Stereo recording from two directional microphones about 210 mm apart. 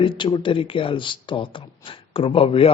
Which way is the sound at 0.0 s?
25° left (ahead or behind).